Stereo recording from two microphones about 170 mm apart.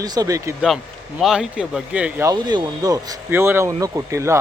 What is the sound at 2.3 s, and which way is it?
Speech, 20° right (ahead or behind).